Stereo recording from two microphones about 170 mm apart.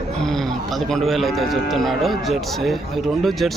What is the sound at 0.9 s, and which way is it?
Speech, centre (ahead or behind).